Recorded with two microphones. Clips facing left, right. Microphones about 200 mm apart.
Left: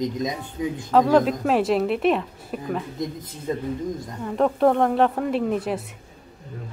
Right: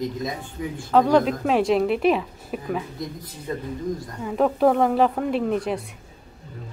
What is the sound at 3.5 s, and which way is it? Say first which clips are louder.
Speech: left 3 dB; 25° left (ahead or behind).